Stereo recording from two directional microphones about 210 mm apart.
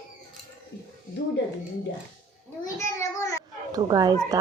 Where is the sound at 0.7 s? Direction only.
55° left (ahead or behind).